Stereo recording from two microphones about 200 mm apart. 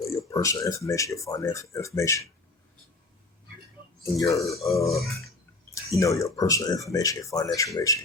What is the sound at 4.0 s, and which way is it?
Speech, 15° left (ahead or behind).